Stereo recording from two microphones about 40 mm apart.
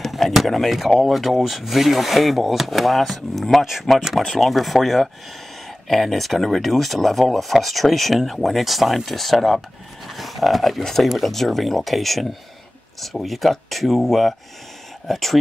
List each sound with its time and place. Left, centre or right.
0.0 s speech: centre
4.3 s speech: centre